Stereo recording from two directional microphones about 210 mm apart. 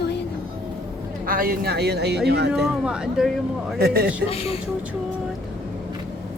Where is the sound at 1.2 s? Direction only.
45° right (ahead or behind).